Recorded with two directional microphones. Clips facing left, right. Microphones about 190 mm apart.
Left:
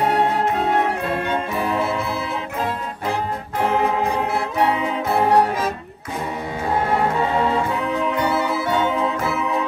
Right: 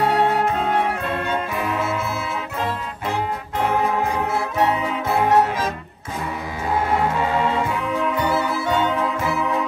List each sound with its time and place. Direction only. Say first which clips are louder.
1.6 s music: left 2 dB; 30° left (ahead or behind)
5.1 s music: left 1 dB; 30° left (ahead or behind)